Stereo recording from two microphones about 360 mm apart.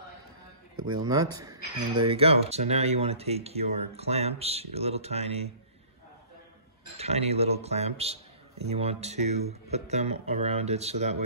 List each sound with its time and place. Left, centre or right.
0.7 s speech: right
1.3 s a man's voice: centre
7.0 s a man's voice: centre